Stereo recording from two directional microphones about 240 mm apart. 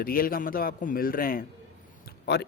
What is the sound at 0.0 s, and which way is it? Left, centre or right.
Speech, left.